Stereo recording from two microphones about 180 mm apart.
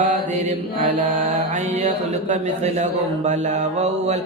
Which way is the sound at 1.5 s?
40° right (ahead or behind).